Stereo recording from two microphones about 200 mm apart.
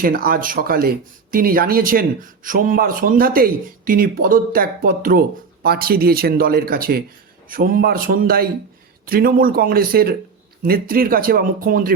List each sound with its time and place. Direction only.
0.0 s speech: 45° right (ahead or behind)